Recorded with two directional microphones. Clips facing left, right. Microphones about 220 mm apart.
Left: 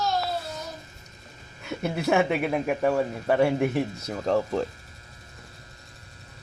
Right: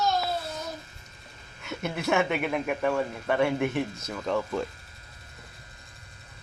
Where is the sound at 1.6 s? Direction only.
35° left (ahead or behind).